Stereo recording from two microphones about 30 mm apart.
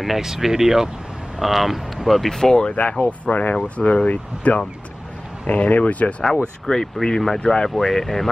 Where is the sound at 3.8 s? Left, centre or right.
Left.